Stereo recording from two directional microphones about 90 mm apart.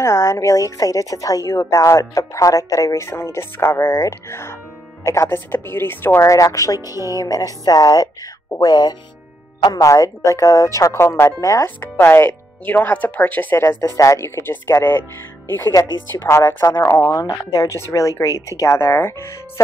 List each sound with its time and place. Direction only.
0.0 s a woman's voice: 30° left (ahead or behind)
6.2 s a woman's voice: 35° left (ahead or behind)
16.1 s speech: 25° left (ahead or behind)
17.2 s a woman's voice: 40° left (ahead or behind)